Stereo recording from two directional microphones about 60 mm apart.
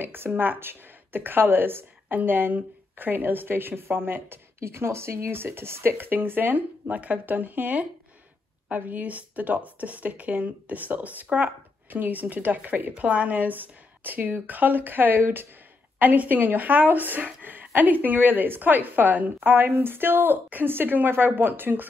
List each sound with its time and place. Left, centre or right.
0.0 s a woman's voice: right
4.6 s a woman's voice: right